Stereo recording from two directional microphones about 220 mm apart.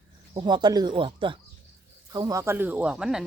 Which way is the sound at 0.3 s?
20° right (ahead or behind).